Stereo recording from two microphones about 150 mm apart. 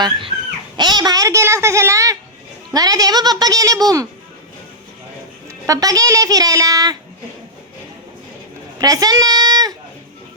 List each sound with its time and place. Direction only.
0.0 s a child's voice: 35° right (ahead or behind)
5.6 s a child's voice: 25° right (ahead or behind)
8.8 s a sound: 25° right (ahead or behind)